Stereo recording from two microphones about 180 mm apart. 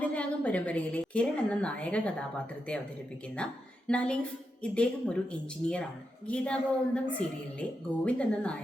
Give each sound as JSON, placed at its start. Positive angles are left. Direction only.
{"t": 0.0, "sound": "a woman's voice", "side_deg": 5}
{"t": 3.3, "sound": "a woman's voice", "side_deg": 5}